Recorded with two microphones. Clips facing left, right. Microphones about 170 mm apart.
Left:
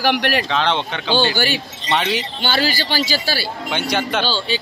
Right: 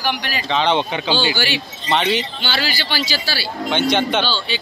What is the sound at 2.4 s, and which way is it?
Speech, 45° left (ahead or behind).